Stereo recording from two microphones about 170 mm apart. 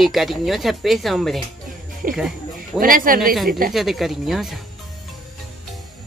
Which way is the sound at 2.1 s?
5° right (ahead or behind).